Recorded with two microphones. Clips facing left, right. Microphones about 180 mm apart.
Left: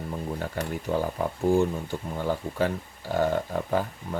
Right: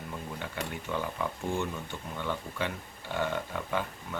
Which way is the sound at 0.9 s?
40° left (ahead or behind).